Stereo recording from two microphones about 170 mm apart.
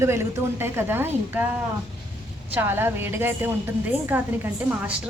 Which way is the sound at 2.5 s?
10° right (ahead or behind).